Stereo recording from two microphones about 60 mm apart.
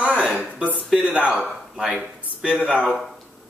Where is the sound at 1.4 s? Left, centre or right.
Centre.